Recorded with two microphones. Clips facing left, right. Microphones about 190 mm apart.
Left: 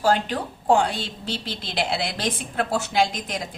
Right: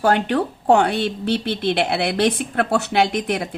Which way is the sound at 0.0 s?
65° right (ahead or behind).